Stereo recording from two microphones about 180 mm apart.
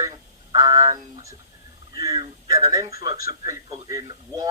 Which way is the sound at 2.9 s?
20° right (ahead or behind).